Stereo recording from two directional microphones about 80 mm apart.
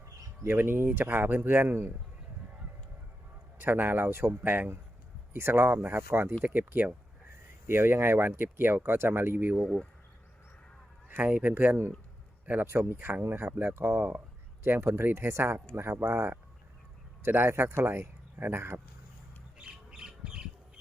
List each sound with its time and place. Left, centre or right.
0.4 s speech: right
3.6 s speech: right
11.1 s speech: right
12.9 s speech: right
19.5 s squawk: centre